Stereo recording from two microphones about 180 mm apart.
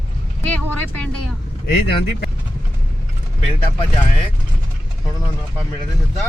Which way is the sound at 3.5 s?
30° left (ahead or behind).